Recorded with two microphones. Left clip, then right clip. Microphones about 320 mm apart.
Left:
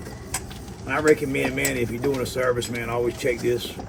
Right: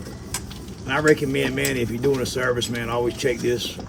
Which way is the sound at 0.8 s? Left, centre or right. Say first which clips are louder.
Right 1 dB; right.